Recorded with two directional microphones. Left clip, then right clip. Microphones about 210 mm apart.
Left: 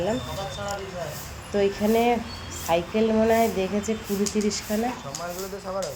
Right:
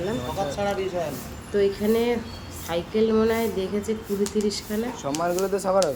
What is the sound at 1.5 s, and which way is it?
Speech, centre (ahead or behind).